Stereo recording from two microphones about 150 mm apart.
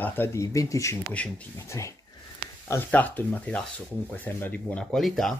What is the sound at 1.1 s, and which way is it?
Speech, 10° left (ahead or behind).